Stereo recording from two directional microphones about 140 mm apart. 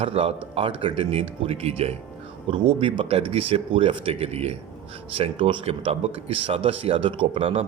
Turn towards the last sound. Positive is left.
turn(degrees=-45)  # may be behind; listen again after turning